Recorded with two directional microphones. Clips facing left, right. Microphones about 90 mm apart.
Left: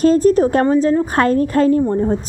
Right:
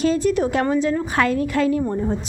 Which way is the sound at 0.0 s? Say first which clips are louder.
Left 7 dB; 40° left (ahead or behind).